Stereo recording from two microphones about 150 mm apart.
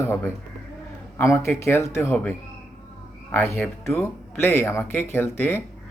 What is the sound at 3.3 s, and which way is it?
Speech, 15° left (ahead or behind).